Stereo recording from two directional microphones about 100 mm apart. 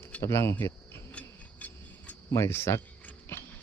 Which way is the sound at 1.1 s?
15° left (ahead or behind).